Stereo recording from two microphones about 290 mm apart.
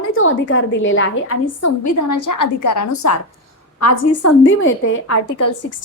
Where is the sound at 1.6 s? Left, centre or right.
Left.